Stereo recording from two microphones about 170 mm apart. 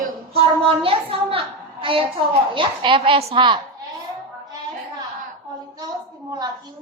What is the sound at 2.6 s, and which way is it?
A child's voice, 30° right (ahead or behind).